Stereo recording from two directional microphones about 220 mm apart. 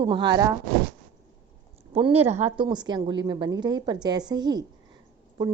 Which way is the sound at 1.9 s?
25° right (ahead or behind).